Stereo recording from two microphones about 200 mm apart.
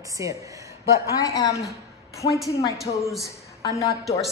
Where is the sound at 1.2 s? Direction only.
15° left (ahead or behind).